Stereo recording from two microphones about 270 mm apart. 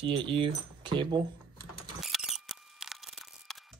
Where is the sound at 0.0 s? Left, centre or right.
Centre.